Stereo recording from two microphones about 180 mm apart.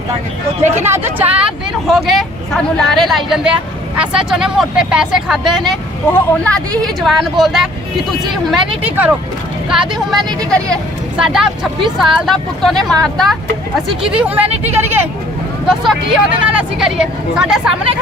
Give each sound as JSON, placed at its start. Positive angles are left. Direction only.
{"t": 0.6, "sound": "speech", "side_deg": -15}
{"t": 8.8, "sound": "speech", "side_deg": -10}
{"t": 14.4, "sound": "speech", "side_deg": -35}
{"t": 14.7, "sound": "speech", "side_deg": -10}
{"t": 15.6, "sound": "speech", "side_deg": 0}